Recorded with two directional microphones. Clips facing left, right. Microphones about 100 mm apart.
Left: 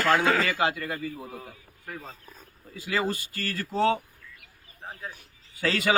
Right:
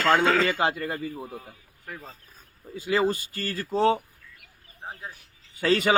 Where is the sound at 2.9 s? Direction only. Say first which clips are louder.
Right 4 dB; 15° right (ahead or behind).